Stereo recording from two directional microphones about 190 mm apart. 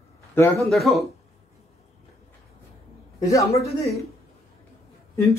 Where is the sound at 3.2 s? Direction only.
20° left (ahead or behind).